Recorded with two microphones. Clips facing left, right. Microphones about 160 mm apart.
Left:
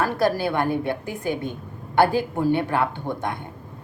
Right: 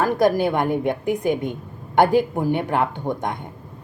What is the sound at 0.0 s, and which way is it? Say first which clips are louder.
A woman's voice: right 4 dB; 15° right (ahead or behind).